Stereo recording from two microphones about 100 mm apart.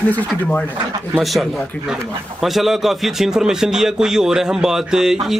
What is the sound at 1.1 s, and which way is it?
Speech, centre (ahead or behind).